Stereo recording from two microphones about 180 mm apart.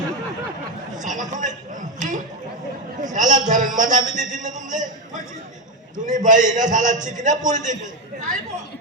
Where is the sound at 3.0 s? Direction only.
45° right (ahead or behind).